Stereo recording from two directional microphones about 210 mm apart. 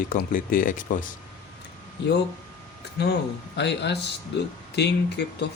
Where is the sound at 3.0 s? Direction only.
50° left (ahead or behind).